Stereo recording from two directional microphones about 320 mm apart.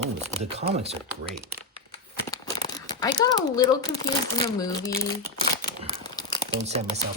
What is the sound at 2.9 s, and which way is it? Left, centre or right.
Speech, centre.